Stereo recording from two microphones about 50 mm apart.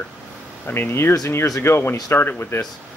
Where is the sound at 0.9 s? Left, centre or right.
Left.